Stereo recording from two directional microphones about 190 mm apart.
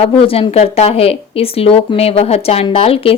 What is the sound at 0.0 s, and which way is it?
Speech, 30° left (ahead or behind).